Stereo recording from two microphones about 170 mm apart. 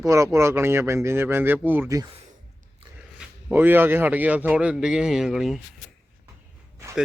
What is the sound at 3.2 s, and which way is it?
A man's voice, 10° right (ahead or behind).